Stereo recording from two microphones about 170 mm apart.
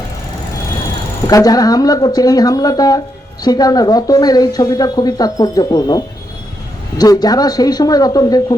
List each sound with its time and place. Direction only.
1.3 s speech: 20° left (ahead or behind)
7.0 s speech: 20° left (ahead or behind)